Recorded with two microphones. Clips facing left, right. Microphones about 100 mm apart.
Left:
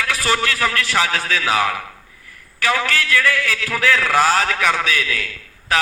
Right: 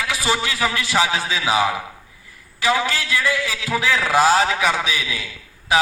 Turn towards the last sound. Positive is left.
turn(degrees=-15)  # may be behind; listen again after turning